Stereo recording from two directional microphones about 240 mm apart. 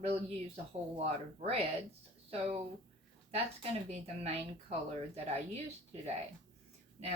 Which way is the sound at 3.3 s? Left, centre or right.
Right.